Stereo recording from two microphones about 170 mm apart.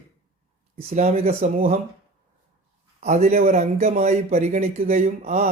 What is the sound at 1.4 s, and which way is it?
Speech, 55° right (ahead or behind).